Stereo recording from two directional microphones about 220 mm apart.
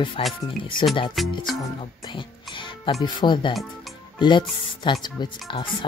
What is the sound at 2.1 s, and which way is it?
Speech, 20° left (ahead or behind).